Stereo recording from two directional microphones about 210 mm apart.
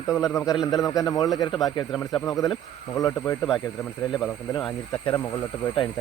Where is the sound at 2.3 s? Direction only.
15° left (ahead or behind).